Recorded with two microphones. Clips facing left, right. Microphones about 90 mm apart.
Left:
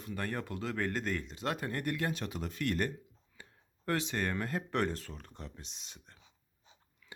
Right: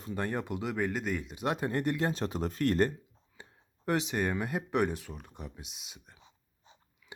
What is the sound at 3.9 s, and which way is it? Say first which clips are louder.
Speech: right 4 dB; 20° right (ahead or behind).